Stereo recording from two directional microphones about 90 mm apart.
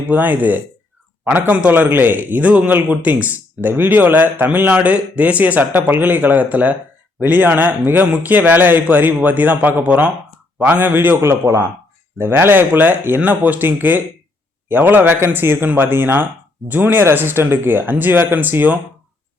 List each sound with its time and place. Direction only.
0.1 s speech: 20° right (ahead or behind)